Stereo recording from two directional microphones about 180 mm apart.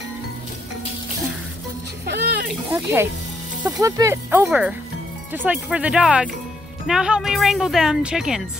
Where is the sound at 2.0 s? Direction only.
65° right (ahead or behind).